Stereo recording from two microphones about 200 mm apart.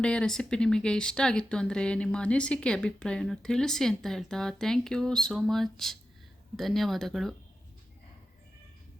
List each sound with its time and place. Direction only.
0.0 s speech: 5° left (ahead or behind)